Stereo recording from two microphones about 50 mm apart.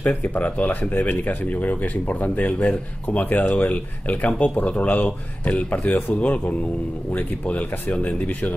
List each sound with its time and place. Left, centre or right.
0.0 s speech: left
6.1 s speech: left